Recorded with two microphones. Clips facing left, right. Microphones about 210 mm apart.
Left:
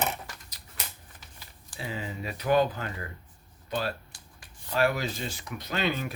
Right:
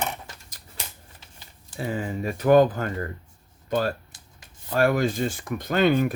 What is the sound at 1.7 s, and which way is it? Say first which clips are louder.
Speech: right 7 dB; 45° right (ahead or behind).